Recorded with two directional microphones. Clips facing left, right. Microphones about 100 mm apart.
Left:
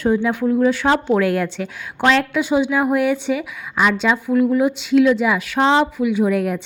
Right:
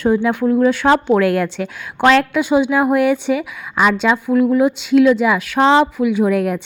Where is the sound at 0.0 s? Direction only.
60° right (ahead or behind).